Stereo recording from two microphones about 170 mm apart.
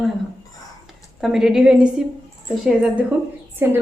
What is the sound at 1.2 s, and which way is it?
Speech, 5° right (ahead or behind).